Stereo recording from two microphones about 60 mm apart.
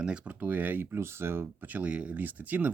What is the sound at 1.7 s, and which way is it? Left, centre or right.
Speech, right.